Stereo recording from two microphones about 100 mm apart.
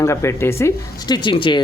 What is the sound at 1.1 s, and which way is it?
Speech, 55° left (ahead or behind).